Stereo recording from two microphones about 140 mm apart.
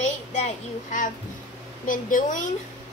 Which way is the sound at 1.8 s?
70° left (ahead or behind).